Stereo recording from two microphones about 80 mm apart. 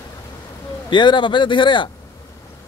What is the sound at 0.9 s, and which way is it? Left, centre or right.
A man's voice, left.